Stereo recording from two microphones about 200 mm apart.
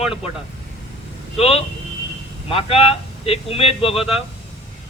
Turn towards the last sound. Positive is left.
turn(degrees=30)  # may be behind; listen again after turning